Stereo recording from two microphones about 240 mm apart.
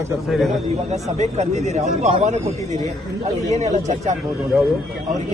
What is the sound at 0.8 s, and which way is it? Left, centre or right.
Speech, right.